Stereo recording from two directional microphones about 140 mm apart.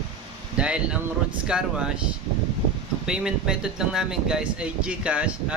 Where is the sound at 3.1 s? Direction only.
5° right (ahead or behind).